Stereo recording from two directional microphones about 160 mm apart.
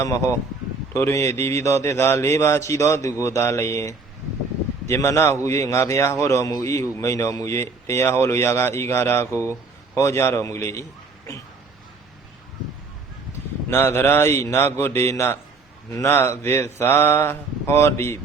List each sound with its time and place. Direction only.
0.0 s speech: 20° left (ahead or behind)
13.7 s speech: 15° left (ahead or behind)